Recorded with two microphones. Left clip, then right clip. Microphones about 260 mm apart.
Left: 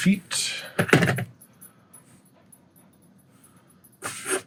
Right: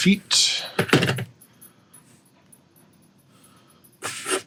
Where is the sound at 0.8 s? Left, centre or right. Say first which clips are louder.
Left 1 dB; centre.